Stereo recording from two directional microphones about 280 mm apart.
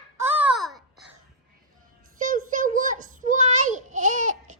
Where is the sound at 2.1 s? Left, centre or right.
Right.